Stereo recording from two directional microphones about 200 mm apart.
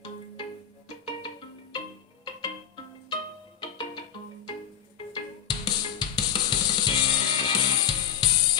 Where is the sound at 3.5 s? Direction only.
20° left (ahead or behind).